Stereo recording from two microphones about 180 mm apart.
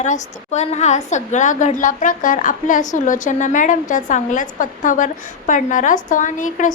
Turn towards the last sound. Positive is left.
turn(degrees=45)  # may be behind; listen again after turning